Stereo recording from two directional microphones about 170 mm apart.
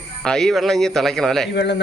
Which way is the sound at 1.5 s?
90° left.